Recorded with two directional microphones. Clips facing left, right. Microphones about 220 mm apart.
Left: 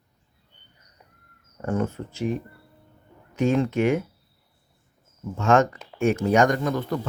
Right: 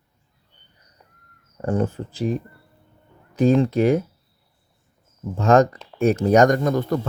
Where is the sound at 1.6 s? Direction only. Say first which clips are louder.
Right 3 dB; 35° right (ahead or behind).